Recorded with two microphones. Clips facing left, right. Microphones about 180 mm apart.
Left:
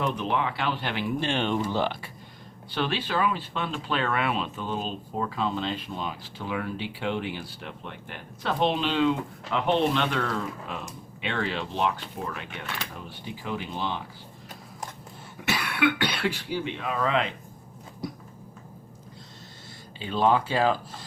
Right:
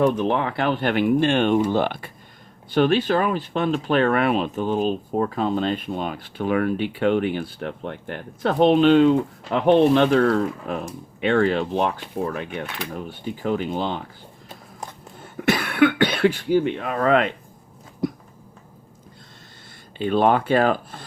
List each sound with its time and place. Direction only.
0.2 s speech: 50° right (ahead or behind)
15.4 s speech: 50° right (ahead or behind)
20.0 s speech: 60° right (ahead or behind)